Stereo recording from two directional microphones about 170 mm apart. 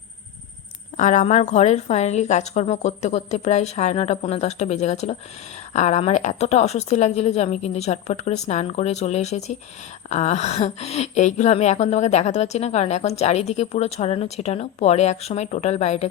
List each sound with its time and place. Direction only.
0.9 s speech: 45° left (ahead or behind)